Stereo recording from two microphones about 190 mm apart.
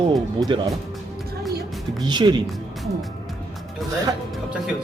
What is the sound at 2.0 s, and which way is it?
Speech, 25° right (ahead or behind).